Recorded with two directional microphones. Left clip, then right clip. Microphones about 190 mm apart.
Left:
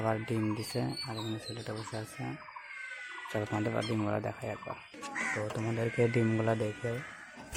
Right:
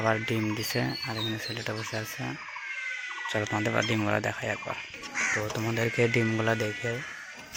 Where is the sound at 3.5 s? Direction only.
Centre (ahead or behind).